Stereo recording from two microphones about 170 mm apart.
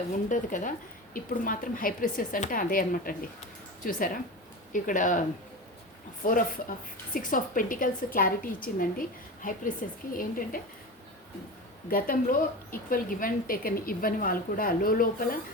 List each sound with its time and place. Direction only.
0.3 s a woman's voice: 50° left (ahead or behind)
6.2 s a woman's voice: 55° left (ahead or behind)
11.9 s a woman's voice: 60° left (ahead or behind)